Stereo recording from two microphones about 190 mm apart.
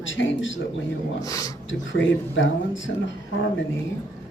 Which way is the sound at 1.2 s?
20° left (ahead or behind).